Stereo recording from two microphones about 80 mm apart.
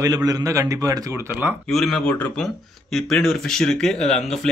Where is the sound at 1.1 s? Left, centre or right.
Right.